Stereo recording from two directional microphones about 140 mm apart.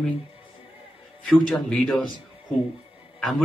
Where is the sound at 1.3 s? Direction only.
5° left (ahead or behind).